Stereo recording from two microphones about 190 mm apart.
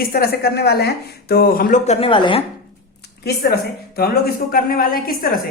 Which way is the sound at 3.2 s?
60° left (ahead or behind).